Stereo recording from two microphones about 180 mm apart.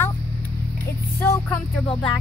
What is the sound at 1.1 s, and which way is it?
Speech, 15° left (ahead or behind).